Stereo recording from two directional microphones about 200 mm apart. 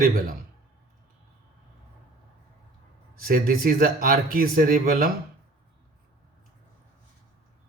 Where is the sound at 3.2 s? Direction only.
45° right (ahead or behind).